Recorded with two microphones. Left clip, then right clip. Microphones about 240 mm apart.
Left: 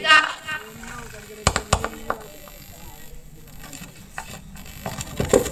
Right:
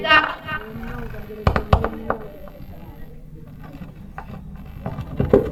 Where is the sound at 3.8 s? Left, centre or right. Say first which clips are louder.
Left 2 dB; left.